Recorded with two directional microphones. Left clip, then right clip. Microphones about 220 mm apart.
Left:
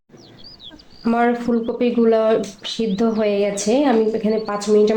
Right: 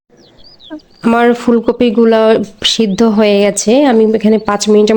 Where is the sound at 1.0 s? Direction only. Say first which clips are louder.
Right 8 dB; 50° right (ahead or behind).